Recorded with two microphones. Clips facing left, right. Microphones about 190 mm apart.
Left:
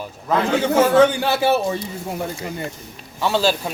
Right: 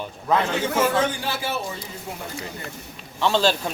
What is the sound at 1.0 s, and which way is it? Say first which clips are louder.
Speech: left 9 dB; 70° left (ahead or behind).